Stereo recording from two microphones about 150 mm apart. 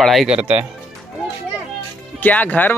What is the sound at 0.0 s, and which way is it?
Speech, centre (ahead or behind).